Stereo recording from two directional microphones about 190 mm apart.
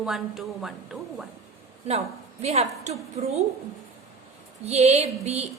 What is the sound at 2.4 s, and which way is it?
Speech, 35° right (ahead or behind).